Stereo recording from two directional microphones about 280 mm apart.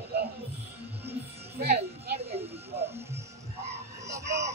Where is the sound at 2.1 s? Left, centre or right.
Right.